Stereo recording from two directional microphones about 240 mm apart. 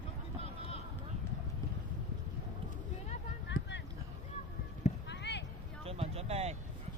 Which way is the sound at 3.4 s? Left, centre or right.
Left.